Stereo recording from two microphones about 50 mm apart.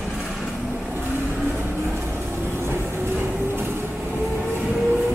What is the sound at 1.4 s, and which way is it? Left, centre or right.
Train, right.